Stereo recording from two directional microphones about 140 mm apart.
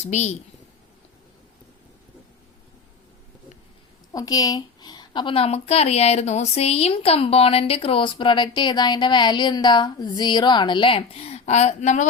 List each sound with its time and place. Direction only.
0.0 s a woman's voice: 50° left (ahead or behind)
4.1 s speech: 25° left (ahead or behind); by 12.0 s 55° left (ahead or behind)